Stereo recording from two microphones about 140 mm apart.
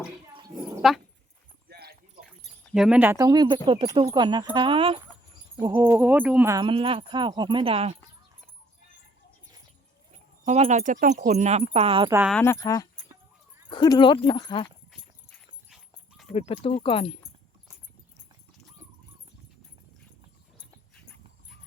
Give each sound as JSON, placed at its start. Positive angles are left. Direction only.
{"t": 0.8, "sound": "speech", "side_deg": 0}
{"t": 2.7, "sound": "speech", "side_deg": -5}
{"t": 3.0, "sound": "speech", "side_deg": -20}
{"t": 3.4, "sound": "speech", "side_deg": -35}
{"t": 5.7, "sound": "speech", "side_deg": -15}
{"t": 6.7, "sound": "speech", "side_deg": -40}
{"t": 10.4, "sound": "speech", "side_deg": -55}
{"t": 12.4, "sound": "speech", "side_deg": 20}
{"t": 16.3, "sound": "speech", "side_deg": 45}